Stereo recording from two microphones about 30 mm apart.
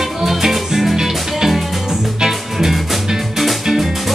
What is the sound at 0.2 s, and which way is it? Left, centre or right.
Music, centre.